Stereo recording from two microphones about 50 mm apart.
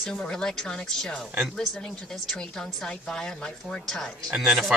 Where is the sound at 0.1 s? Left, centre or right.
Centre.